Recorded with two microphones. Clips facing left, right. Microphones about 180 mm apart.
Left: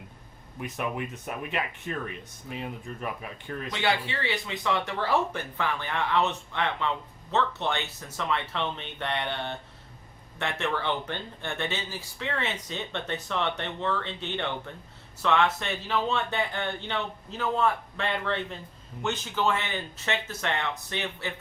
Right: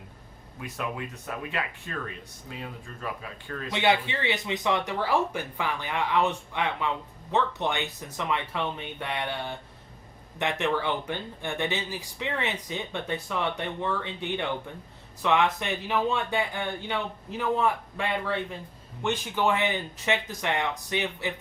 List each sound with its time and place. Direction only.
0.6 s speech: 20° left (ahead or behind)
3.7 s speech: 20° right (ahead or behind)